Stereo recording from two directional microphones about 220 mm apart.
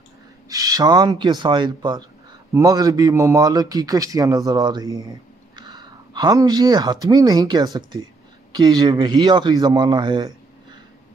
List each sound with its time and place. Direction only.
0.5 s a man's voice: 15° right (ahead or behind)